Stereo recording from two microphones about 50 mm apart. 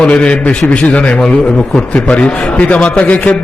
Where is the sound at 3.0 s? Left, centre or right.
Left.